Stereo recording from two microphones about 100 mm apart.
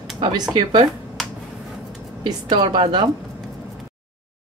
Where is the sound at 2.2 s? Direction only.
55° right (ahead or behind).